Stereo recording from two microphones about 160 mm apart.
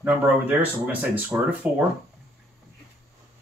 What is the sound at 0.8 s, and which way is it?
Speech, 10° right (ahead or behind).